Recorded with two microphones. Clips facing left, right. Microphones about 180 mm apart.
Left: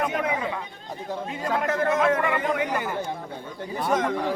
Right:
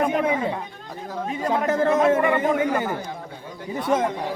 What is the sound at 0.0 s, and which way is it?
A man's voice, 30° right (ahead or behind).